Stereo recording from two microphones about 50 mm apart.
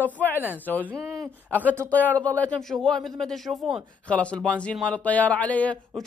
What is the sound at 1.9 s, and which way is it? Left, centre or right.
Speech, left.